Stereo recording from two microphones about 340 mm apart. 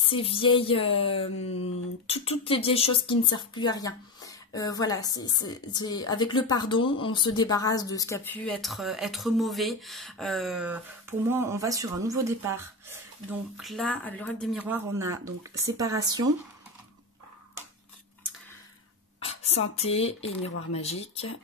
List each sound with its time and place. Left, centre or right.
0.0 s a woman's voice: centre
19.8 s speech: centre